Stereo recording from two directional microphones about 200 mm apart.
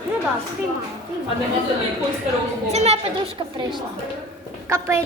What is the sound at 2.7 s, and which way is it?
Speech, 30° right (ahead or behind).